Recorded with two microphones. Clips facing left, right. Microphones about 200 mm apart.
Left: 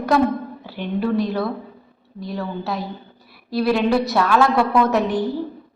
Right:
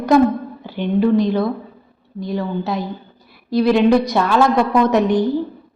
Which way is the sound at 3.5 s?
5° left (ahead or behind).